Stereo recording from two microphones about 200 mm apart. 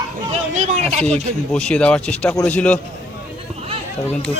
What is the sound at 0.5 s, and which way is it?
Speech, 35° right (ahead or behind).